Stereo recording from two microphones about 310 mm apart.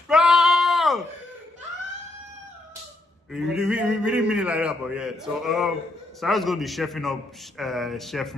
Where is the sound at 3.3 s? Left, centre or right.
Centre.